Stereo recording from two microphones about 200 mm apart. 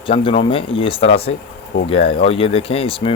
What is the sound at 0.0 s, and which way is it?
Speech, 25° left (ahead or behind).